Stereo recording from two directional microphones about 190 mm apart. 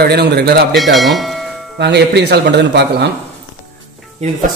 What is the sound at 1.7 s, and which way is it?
A man's voice, 60° right (ahead or behind).